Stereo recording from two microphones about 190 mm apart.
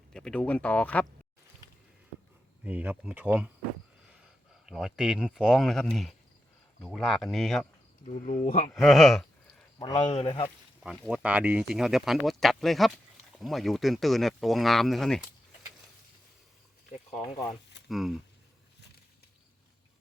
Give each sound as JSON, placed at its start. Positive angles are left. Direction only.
{"t": 0.1, "sound": "speech", "side_deg": 5}
{"t": 2.6, "sound": "speech", "side_deg": -10}
{"t": 4.6, "sound": "speech", "side_deg": 0}
{"t": 8.0, "sound": "a man's voice", "side_deg": 40}
{"t": 8.7, "sound": "speech", "side_deg": 0}
{"t": 9.7, "sound": "speech", "side_deg": 20}
{"t": 10.8, "sound": "speech", "side_deg": 0}
{"t": 17.8, "sound": "speech", "side_deg": 0}